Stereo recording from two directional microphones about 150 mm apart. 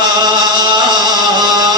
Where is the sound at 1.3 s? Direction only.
30° right (ahead or behind).